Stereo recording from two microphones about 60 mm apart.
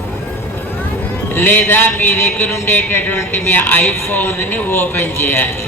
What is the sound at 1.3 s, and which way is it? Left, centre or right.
Speech, left.